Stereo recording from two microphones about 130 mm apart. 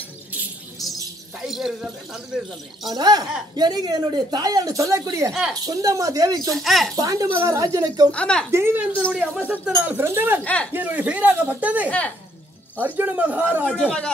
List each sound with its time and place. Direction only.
1.5 s speech: centre (ahead or behind)
2.9 s speech: 30° right (ahead or behind)
5.3 s speech: centre (ahead or behind)
5.7 s speech: 25° right (ahead or behind)
6.5 s speech: centre (ahead or behind)
7.0 s speech: 25° right (ahead or behind)
8.1 s speech: 10° left (ahead or behind)
8.5 s speech: 20° right (ahead or behind)
9.1 s speech: 5° right (ahead or behind)
10.4 s speech: 10° left (ahead or behind)
10.7 s speech: 10° right (ahead or behind)
13.7 s speech: 5° left (ahead or behind)